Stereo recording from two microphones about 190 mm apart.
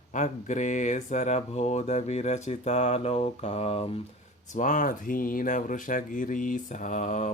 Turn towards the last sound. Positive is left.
turn(degrees=40)  # may be behind; listen again after turning